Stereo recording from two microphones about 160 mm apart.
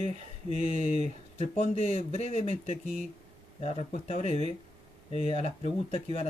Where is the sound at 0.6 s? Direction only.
50° right (ahead or behind).